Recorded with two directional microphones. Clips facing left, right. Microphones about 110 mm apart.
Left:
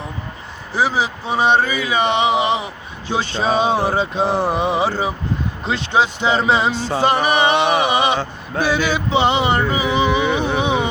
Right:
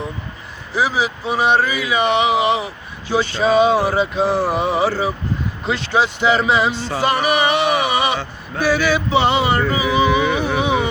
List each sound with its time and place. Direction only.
0.7 s speech: 30° left (ahead or behind)